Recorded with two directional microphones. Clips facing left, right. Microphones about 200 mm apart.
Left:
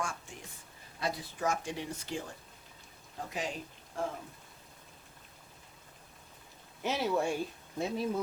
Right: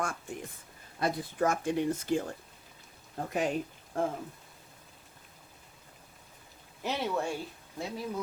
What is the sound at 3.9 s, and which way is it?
Speech, 55° right (ahead or behind).